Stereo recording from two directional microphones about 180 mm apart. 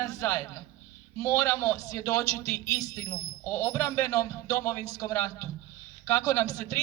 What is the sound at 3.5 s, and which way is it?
A man's voice, 15° left (ahead or behind).